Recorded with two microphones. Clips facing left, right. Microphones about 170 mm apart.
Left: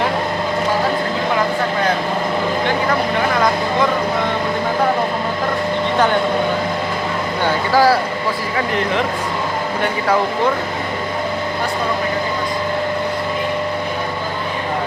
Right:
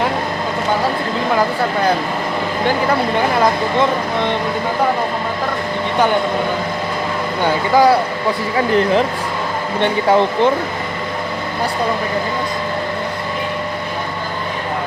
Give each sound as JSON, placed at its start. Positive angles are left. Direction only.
{"t": 7.7, "sound": "speech", "side_deg": -20}
{"t": 9.8, "sound": "speech", "side_deg": -25}